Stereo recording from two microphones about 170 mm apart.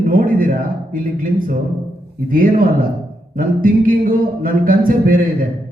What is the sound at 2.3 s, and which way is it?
A man's voice, 55° right (ahead or behind).